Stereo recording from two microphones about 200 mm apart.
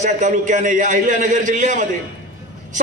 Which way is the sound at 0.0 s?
40° right (ahead or behind).